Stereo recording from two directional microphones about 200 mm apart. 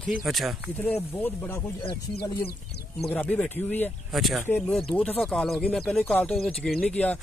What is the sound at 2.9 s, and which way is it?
Speech, 5° left (ahead or behind).